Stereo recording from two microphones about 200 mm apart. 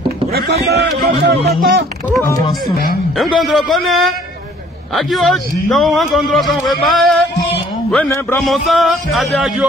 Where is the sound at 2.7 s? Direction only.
50° left (ahead or behind).